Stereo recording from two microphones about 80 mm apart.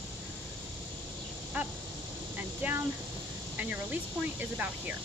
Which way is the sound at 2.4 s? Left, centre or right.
Right.